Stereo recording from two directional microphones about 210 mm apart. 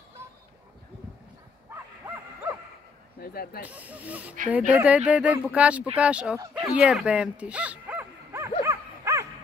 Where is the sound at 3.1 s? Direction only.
45° left (ahead or behind).